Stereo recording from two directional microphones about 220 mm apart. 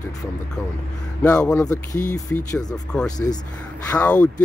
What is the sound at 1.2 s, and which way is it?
Speech, 5° left (ahead or behind).